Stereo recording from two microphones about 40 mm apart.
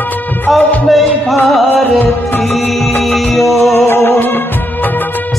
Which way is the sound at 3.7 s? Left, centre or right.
Left.